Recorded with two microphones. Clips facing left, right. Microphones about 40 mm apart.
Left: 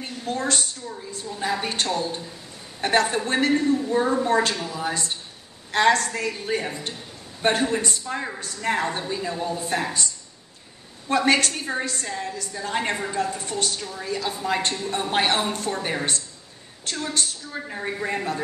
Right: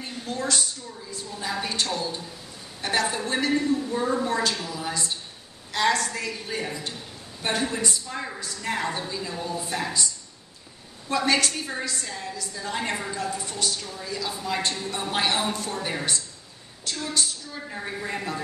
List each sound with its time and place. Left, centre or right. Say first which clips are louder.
0.2 s a woman's voice: left 2 dB; left
9.5 s a woman's voice: left 2 dB; left
11.1 s a woman's voice: left 3 dB; left
17.6 s a woman's voice: left 3 dB; centre
18.1 s a woman's voice: left 2 dB; left